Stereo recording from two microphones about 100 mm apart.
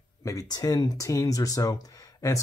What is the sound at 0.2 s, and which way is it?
Speech, 35° left (ahead or behind).